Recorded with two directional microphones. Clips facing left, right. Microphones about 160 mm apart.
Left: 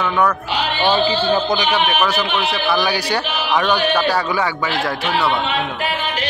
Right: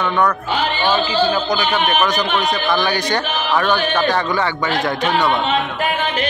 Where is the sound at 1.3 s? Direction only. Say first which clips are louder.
Left 2 dB; 25° left (ahead or behind).